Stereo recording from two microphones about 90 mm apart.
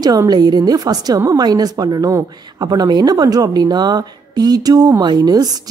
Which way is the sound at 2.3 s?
50° right (ahead or behind).